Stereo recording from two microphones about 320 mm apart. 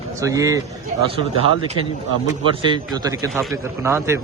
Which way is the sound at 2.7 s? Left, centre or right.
Centre.